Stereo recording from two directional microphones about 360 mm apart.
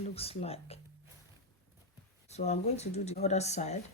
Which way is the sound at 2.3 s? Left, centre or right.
Centre.